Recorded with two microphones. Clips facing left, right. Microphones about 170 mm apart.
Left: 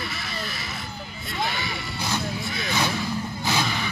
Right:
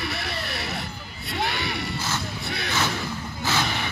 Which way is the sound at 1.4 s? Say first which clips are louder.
Right 1 dB; 65° right (ahead or behind).